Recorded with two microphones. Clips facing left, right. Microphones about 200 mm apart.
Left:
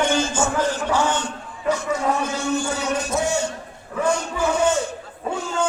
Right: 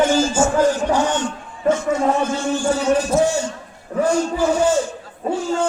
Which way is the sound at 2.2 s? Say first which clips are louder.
Right 3 dB; 30° right (ahead or behind).